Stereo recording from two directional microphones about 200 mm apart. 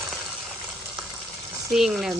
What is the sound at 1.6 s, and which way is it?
Speech, centre (ahead or behind).